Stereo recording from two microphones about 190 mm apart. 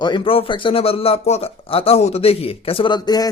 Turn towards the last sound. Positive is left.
turn(degrees=20)  # may be behind; listen again after turning